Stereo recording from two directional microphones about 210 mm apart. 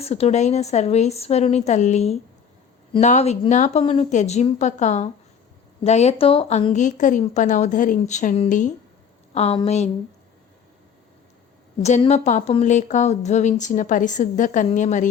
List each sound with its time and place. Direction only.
0.0 s a woman's voice: 30° left (ahead or behind)
11.8 s a woman's voice: 30° left (ahead or behind)